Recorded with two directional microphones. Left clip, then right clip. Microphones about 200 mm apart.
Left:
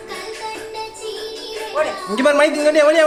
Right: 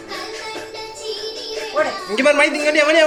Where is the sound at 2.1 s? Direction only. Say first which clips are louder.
Left 1 dB; 35° left (ahead or behind).